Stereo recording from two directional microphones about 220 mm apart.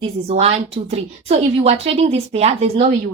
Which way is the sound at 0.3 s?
25° right (ahead or behind).